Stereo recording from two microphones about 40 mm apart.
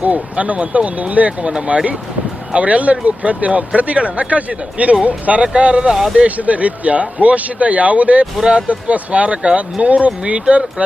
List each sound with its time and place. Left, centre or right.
0.0 s speech: right